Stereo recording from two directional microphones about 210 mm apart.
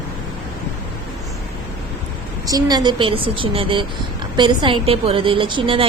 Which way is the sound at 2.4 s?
20° right (ahead or behind).